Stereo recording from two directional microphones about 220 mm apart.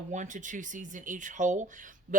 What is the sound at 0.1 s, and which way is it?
Speech, 35° right (ahead or behind).